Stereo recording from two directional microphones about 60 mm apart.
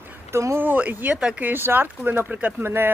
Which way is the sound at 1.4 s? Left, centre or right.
Right.